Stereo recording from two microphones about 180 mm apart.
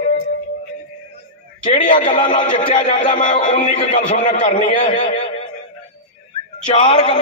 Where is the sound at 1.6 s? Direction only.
45° left (ahead or behind).